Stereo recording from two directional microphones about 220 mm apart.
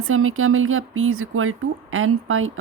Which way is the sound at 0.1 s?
70° right (ahead or behind).